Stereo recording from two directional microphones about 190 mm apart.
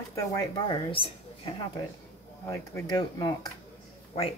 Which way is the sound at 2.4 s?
15° left (ahead or behind).